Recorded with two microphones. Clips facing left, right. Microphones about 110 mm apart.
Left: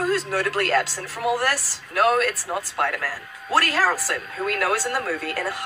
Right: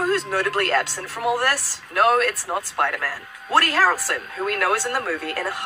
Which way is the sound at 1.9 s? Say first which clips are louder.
Right 1 dB; 25° right (ahead or behind).